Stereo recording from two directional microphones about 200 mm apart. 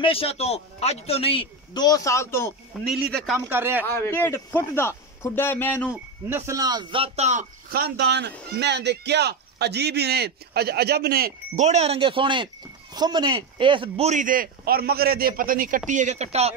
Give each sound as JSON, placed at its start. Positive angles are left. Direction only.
{"t": 0.0, "sound": "a man's voice", "side_deg": 30}
{"t": 2.9, "sound": "a man's voice", "side_deg": 0}
{"t": 3.3, "sound": "speech", "side_deg": -10}
{"t": 3.8, "sound": "a man's voice", "side_deg": 10}
{"t": 6.2, "sound": "a man's voice", "side_deg": -10}
{"t": 7.7, "sound": "a man's voice", "side_deg": -55}
{"t": 11.6, "sound": "a man's voice", "side_deg": -35}